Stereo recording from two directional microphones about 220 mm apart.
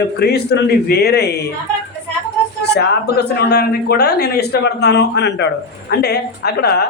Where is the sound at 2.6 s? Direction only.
50° left (ahead or behind).